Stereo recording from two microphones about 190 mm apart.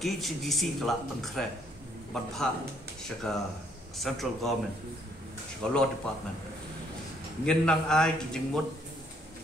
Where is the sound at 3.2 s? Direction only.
5° left (ahead or behind).